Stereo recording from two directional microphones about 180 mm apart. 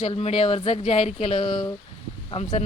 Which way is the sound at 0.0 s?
35° left (ahead or behind).